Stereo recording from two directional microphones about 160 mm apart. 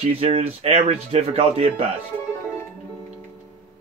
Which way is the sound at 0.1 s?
35° right (ahead or behind).